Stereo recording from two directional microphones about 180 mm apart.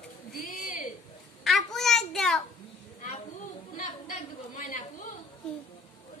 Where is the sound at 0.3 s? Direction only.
50° left (ahead or behind).